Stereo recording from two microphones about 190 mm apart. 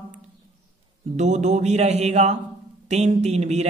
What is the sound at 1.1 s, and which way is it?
A man's voice, 35° right (ahead or behind).